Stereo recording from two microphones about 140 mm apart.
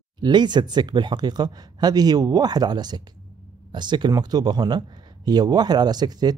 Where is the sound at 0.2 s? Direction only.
30° right (ahead or behind).